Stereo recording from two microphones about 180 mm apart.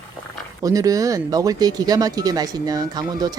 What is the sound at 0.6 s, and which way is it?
Speech, 20° right (ahead or behind).